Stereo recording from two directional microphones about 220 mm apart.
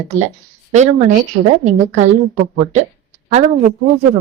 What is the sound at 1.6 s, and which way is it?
A woman's voice, 30° right (ahead or behind).